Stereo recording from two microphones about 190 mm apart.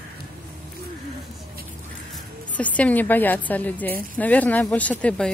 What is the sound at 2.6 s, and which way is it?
Speech, 5° left (ahead or behind).